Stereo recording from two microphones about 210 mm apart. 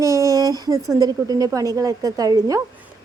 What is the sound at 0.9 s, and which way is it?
A woman's voice, 15° right (ahead or behind).